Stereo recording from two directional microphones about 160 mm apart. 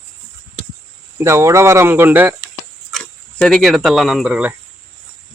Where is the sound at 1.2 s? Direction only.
15° right (ahead or behind).